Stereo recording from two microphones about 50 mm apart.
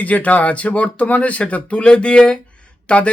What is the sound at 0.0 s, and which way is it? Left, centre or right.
Speech, left.